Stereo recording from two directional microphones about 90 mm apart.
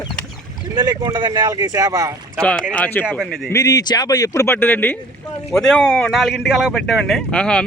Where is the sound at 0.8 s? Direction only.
50° right (ahead or behind).